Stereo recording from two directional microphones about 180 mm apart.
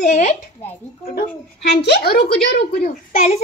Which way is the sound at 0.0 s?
40° left (ahead or behind).